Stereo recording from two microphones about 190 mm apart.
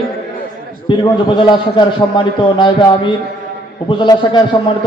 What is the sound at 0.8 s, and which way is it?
A man's voice, 25° left (ahead or behind).